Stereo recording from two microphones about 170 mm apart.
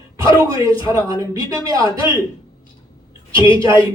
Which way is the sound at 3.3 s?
30° left (ahead or behind).